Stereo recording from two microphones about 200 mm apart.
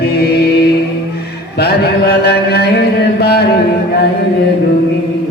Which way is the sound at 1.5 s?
55° left (ahead or behind).